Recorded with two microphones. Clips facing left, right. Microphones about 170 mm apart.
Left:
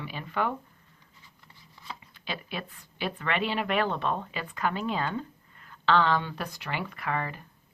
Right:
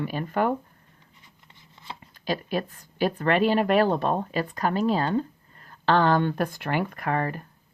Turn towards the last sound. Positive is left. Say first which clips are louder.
# right 5 dB
turn(degrees=-45)  # may be behind; listen again after turning